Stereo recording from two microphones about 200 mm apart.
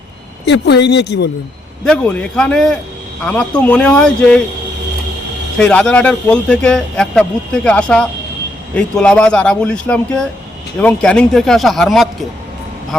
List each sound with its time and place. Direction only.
0.4 s speech: 60° left (ahead or behind)
1.8 s a man's voice: 5° left (ahead or behind)
5.5 s a man's voice: 5° left (ahead or behind)